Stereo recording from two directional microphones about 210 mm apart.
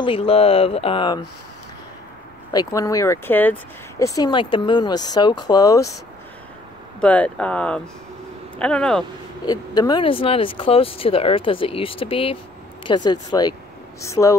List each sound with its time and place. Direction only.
0.0 s speech: 25° left (ahead or behind)
2.5 s speech: 20° left (ahead or behind)
7.0 s speech: 5° left (ahead or behind)
9.5 s speech: 20° left (ahead or behind)